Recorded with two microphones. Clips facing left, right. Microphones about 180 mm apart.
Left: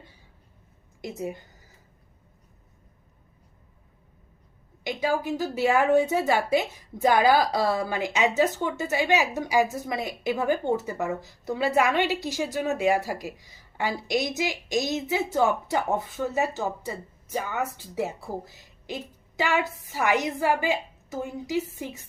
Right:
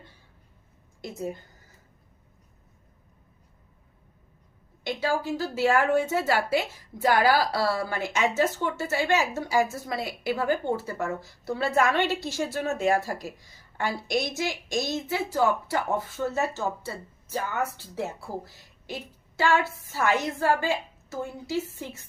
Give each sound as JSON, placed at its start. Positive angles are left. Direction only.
{"t": 1.0, "sound": "a woman's voice", "side_deg": 10}
{"t": 4.8, "sound": "a woman's voice", "side_deg": 15}